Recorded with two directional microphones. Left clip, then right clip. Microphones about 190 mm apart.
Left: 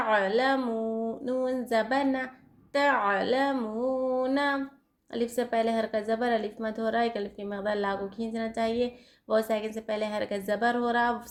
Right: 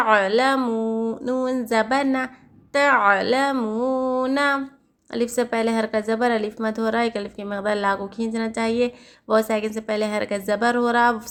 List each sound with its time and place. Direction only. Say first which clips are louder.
0.0 s speech: right 7 dB; 25° right (ahead or behind)